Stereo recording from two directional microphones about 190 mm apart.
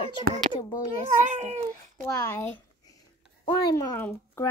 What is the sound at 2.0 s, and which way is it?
Speech, 15° left (ahead or behind).